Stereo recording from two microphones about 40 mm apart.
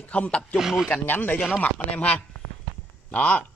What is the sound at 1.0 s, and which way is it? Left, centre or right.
Speech, left.